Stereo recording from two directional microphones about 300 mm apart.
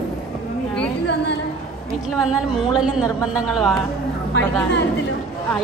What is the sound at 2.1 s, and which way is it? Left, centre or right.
A woman's voice, centre.